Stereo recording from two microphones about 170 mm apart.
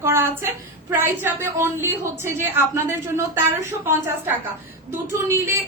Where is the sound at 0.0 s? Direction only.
15° right (ahead or behind).